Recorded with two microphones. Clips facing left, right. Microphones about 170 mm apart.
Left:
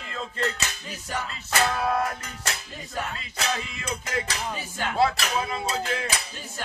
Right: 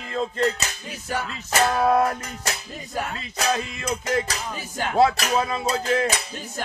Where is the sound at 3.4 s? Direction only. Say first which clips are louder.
Right 6 dB; 40° right (ahead or behind).